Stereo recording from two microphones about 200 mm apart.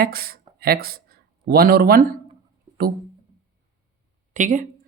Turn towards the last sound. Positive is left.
turn(degrees=-40)  # may be behind; listen again after turning